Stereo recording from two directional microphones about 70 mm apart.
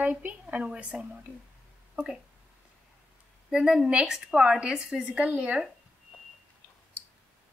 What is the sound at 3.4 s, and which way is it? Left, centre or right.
A woman's voice, centre.